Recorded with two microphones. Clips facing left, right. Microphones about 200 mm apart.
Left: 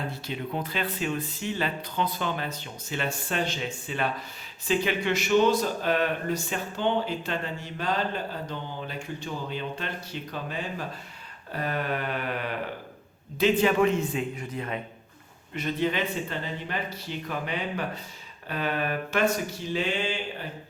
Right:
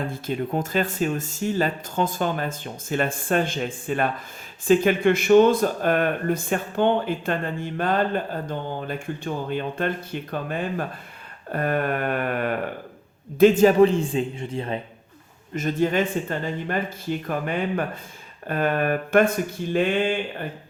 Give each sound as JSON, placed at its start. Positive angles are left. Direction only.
{"t": 0.1, "sound": "a man's voice", "side_deg": -45}
{"t": 15.5, "sound": "speech", "side_deg": -45}